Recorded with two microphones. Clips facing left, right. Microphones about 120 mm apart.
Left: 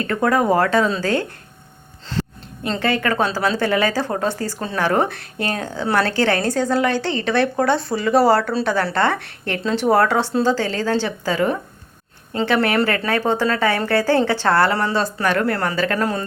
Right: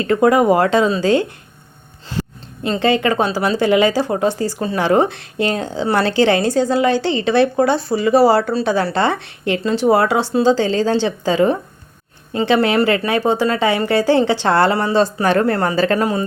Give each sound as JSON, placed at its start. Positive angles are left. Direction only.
{"t": 0.0, "sound": "speech", "side_deg": -15}
{"t": 2.6, "sound": "a woman's voice", "side_deg": -20}
{"t": 16.0, "sound": "speech", "side_deg": -10}